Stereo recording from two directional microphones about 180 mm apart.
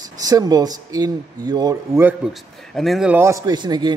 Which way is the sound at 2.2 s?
Centre (ahead or behind).